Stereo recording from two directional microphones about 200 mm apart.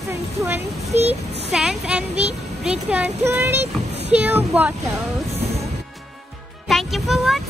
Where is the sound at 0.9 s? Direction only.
30° right (ahead or behind).